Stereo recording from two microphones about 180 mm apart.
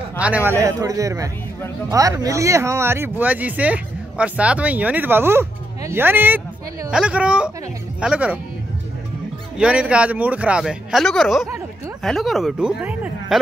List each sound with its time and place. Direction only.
0.2 s speech: 10° right (ahead or behind)
9.6 s speech: 5° right (ahead or behind)